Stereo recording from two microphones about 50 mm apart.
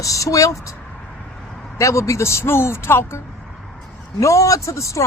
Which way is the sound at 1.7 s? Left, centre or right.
Left.